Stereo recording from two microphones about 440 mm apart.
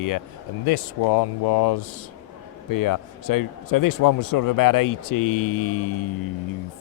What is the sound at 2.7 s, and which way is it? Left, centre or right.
Speech, left.